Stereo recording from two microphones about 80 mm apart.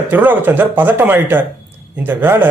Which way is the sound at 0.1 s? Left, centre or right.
Right.